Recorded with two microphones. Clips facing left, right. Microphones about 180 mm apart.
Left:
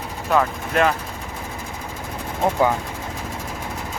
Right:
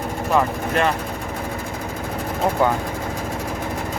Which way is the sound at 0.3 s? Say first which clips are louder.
Even; centre (ahead or behind).